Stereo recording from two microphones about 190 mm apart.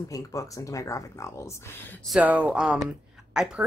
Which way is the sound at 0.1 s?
15° left (ahead or behind).